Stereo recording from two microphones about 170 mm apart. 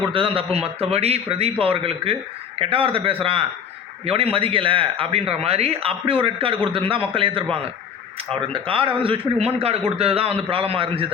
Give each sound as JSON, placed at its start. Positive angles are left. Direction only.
{"t": 0.1, "sound": "a man's voice", "side_deg": -30}